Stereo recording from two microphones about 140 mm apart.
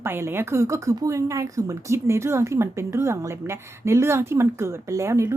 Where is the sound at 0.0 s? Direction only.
15° right (ahead or behind).